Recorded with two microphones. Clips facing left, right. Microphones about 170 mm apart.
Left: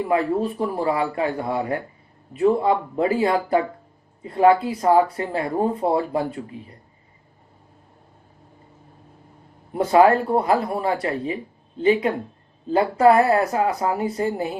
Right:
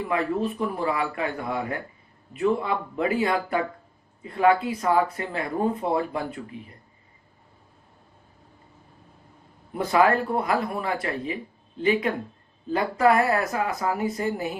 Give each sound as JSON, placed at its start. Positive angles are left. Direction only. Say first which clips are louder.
{"t": 0.1, "sound": "speech", "louder": "left 4 dB", "side_deg": 30}
{"t": 9.7, "sound": "speech", "louder": "left 5 dB", "side_deg": 30}